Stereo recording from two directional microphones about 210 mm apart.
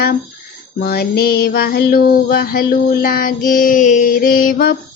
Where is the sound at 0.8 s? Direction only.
45° left (ahead or behind).